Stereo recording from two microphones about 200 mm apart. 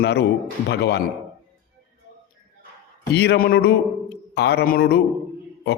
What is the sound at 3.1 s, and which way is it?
Speech, 55° left (ahead or behind).